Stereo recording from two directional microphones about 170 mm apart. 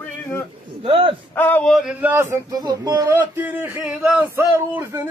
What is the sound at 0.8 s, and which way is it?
Speech, 30° right (ahead or behind).